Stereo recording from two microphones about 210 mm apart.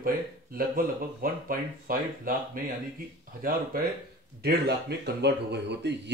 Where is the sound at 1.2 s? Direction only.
40° right (ahead or behind).